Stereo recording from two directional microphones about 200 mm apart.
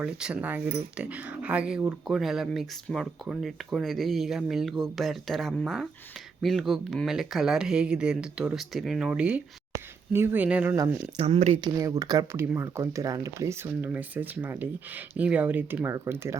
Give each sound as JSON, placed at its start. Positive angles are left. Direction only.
{"t": 0.0, "sound": "speech", "side_deg": -5}
{"t": 11.2, "sound": "speech", "side_deg": -30}
{"t": 11.6, "sound": "speech", "side_deg": -20}